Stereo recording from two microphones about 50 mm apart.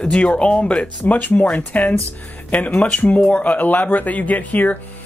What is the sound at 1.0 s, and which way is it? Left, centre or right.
Speech, left.